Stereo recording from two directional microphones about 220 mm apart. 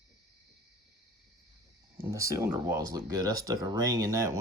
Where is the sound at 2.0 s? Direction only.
15° right (ahead or behind).